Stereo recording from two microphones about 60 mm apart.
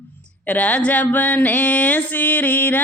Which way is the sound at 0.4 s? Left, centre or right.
Left.